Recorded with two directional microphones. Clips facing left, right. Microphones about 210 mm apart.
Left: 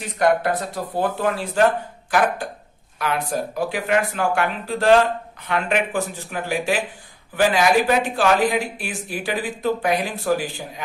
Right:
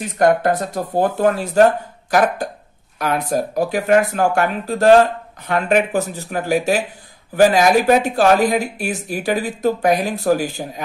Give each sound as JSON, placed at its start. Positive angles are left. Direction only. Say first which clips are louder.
{"t": 0.2, "sound": "speech", "louder": "right 4 dB", "side_deg": -45}